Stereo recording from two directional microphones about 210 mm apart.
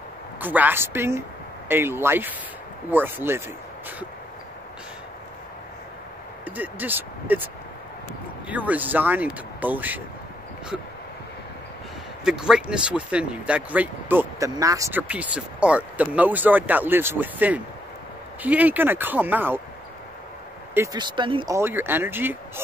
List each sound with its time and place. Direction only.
0.4 s speech: 10° right (ahead or behind)
6.4 s speech: 10° right (ahead or behind)
8.5 s speech: 5° right (ahead or behind)
12.3 s speech: 5° right (ahead or behind)
20.7 s speech: 15° right (ahead or behind)
21.5 s speech: 10° right (ahead or behind)